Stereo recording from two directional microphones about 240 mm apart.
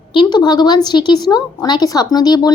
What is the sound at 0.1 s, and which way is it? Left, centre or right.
Speech, centre.